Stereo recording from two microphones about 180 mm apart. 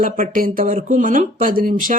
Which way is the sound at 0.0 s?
50° right (ahead or behind).